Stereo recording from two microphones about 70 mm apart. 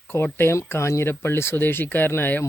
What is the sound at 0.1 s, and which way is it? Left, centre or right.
Speech, left.